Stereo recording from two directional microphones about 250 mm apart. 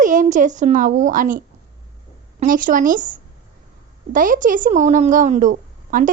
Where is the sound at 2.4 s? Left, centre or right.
Right.